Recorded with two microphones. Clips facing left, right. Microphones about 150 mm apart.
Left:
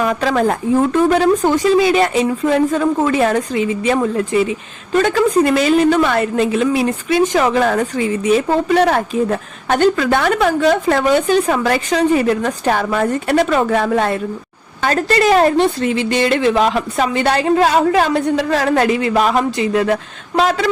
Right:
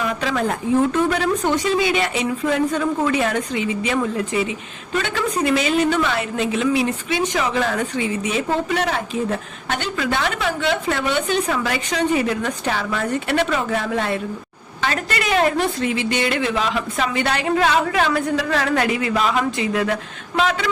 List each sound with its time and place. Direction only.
0.0 s a woman's voice: 45° left (ahead or behind)
14.9 s a woman's voice: 35° left (ahead or behind)
19.1 s a woman's voice: 45° left (ahead or behind)